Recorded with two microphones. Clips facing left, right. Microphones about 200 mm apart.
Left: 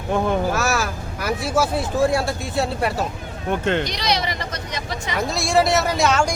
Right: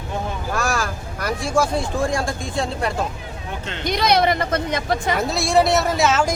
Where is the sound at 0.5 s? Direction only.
5° left (ahead or behind).